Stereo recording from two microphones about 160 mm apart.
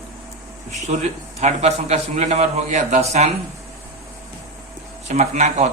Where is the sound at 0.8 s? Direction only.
45° right (ahead or behind).